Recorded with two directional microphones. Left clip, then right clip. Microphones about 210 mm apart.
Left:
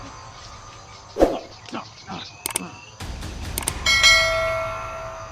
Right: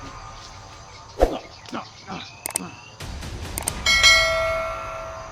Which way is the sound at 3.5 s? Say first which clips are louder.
Even; centre (ahead or behind).